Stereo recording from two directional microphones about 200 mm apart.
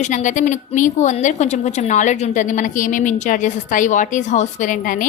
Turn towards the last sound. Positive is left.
turn(degrees=40)  # may be behind; listen again after turning